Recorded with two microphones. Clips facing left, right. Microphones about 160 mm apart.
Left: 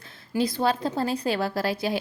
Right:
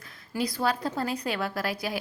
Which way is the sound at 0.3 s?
25° left (ahead or behind).